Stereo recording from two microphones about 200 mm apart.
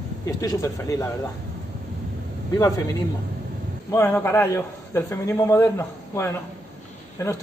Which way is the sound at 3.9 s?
10° left (ahead or behind).